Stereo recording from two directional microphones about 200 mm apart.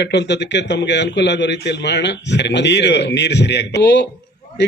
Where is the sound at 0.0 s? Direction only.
60° left (ahead or behind).